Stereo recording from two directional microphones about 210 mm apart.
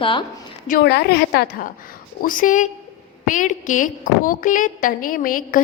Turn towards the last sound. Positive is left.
turn(degrees=40)  # may be behind; listen again after turning